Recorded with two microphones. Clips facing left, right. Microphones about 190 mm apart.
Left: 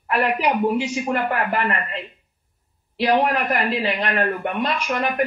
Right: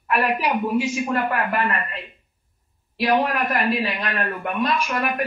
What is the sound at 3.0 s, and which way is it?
Speech, 25° left (ahead or behind).